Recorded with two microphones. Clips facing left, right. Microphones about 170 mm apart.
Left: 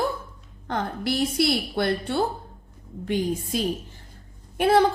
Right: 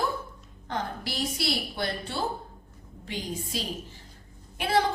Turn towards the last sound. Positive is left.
turn(degrees=50)  # may be behind; listen again after turning